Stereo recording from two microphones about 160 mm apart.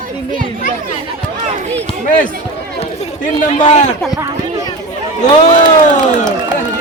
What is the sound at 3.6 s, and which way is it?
Speech, 45° left (ahead or behind).